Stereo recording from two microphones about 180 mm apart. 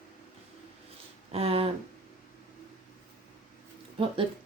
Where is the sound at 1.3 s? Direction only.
35° right (ahead or behind).